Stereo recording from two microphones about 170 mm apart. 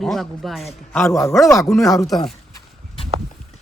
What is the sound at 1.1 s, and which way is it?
Speech, 15° left (ahead or behind).